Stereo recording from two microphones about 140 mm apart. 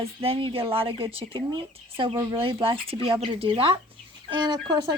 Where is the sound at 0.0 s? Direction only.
45° right (ahead or behind).